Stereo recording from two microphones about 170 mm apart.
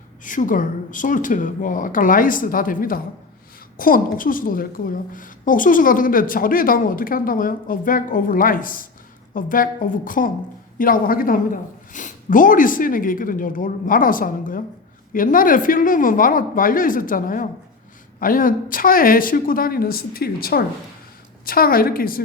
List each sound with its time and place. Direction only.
0.3 s a woman's voice: 50° left (ahead or behind)